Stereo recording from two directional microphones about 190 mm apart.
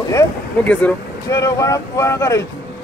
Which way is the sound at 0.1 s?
10° left (ahead or behind).